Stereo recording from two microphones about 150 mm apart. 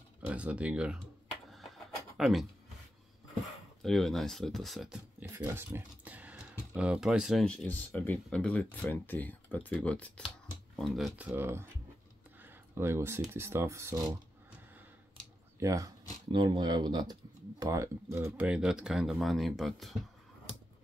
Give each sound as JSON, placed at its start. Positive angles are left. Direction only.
{"t": 0.3, "sound": "speech", "side_deg": -10}
{"t": 2.1, "sound": "speech", "side_deg": 0}
{"t": 3.8, "sound": "speech", "side_deg": 0}
{"t": 5.2, "sound": "speech", "side_deg": -15}
{"t": 7.6, "sound": "speech", "side_deg": 10}
{"t": 11.1, "sound": "speech", "side_deg": -10}
{"t": 12.4, "sound": "a sound", "side_deg": -15}
{"t": 13.3, "sound": "speech", "side_deg": -15}
{"t": 15.6, "sound": "speech", "side_deg": -20}
{"t": 18.5, "sound": "speech", "side_deg": -5}